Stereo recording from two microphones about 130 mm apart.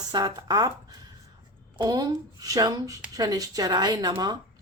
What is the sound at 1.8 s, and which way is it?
A woman's voice, 30° right (ahead or behind).